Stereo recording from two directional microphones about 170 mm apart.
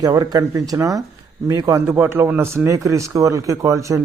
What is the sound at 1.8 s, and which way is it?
A man's voice, 10° right (ahead or behind).